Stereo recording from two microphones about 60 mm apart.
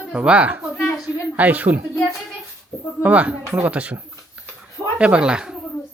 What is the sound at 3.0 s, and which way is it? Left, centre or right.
A woman's voice, right.